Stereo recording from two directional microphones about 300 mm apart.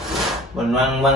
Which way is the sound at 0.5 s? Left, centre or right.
Centre.